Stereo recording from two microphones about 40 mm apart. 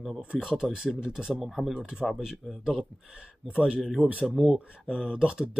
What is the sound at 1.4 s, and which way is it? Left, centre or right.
Speech, centre.